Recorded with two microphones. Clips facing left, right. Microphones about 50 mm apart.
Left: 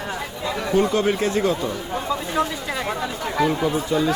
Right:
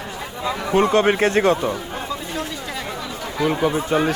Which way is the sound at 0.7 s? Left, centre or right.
Right.